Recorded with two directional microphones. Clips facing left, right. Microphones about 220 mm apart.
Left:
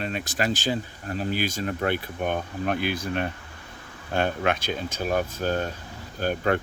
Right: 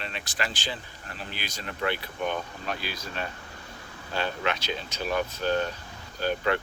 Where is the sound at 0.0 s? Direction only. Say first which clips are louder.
Left 7 dB; 45° left (ahead or behind).